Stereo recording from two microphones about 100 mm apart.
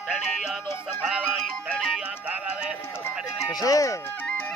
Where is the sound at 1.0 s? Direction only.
5° right (ahead or behind).